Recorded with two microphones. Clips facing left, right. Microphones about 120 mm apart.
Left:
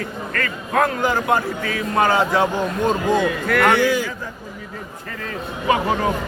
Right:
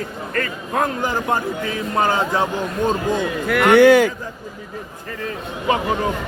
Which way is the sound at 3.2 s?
15° right (ahead or behind).